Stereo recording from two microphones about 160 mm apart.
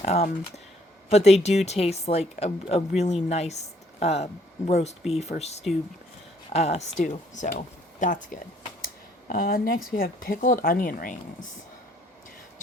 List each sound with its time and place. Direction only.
0.0 s speech: 45° left (ahead or behind)
8.8 s a sound: 65° left (ahead or behind)
9.9 s speech: 65° left (ahead or behind)